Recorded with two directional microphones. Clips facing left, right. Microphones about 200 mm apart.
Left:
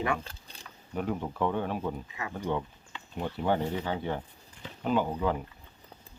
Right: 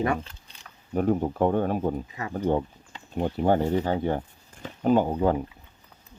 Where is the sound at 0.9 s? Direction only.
45° right (ahead or behind).